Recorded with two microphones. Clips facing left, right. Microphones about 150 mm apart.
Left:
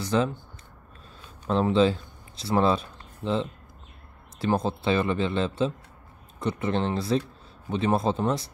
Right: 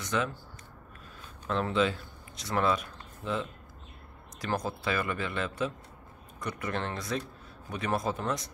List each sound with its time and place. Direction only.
0.0 s speech: 30° left (ahead or behind)
1.5 s speech: 30° left (ahead or behind)